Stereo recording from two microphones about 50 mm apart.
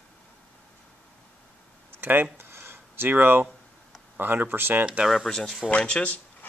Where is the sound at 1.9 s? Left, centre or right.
Right.